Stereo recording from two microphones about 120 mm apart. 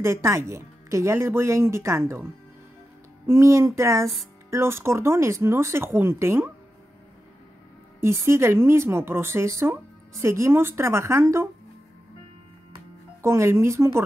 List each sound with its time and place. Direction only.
0.0 s speech: 25° right (ahead or behind)
3.3 s speech: 25° right (ahead or behind)
8.0 s speech: 20° right (ahead or behind)
13.2 s speech: 20° right (ahead or behind)